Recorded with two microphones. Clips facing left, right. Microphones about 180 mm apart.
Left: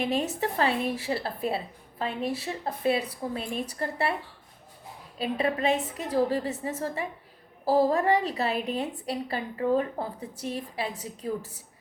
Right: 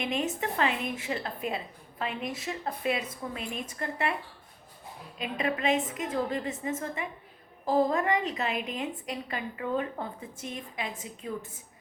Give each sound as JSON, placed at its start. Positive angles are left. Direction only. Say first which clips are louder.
{"t": 0.0, "sound": "speech", "louder": "left 3 dB", "side_deg": 35}
{"t": 5.1, "sound": "speech", "louder": "left 4 dB", "side_deg": 35}